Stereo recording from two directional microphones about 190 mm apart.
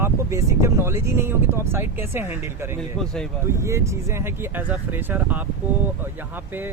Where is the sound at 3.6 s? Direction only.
15° right (ahead or behind).